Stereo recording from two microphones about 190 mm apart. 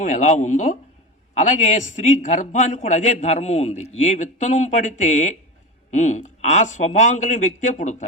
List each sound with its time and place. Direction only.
0.0 s a man's voice: 40° left (ahead or behind)